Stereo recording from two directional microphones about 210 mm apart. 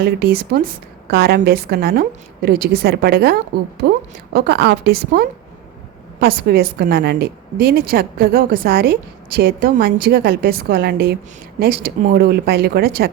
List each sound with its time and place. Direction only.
0.0 s a woman's voice: 45° right (ahead or behind)